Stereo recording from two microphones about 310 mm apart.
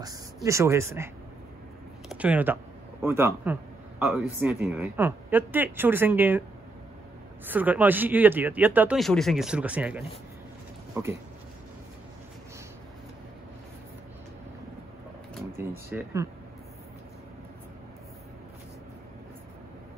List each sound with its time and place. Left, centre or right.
0.0 s speech: centre
7.4 s speech: centre
15.5 s speech: centre